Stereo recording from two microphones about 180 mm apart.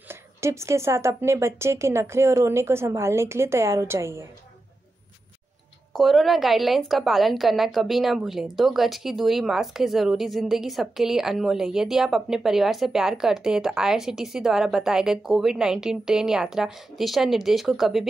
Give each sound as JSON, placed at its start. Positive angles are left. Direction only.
{"t": 0.1, "sound": "a woman's voice", "side_deg": -15}
{"t": 5.9, "sound": "a woman's voice", "side_deg": 0}